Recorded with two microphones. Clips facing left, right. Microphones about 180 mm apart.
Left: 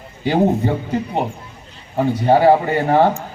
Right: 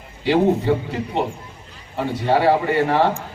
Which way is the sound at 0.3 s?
45° left (ahead or behind).